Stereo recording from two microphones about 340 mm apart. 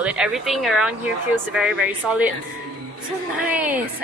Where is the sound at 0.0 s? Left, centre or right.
Centre.